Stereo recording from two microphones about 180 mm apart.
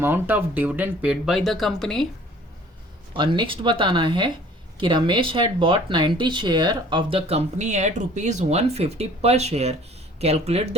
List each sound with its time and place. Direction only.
0.0 s speech: 10° right (ahead or behind)
3.2 s speech: 25° right (ahead or behind)